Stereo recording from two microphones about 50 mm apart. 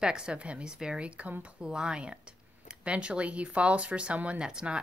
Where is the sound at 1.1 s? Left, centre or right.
Right.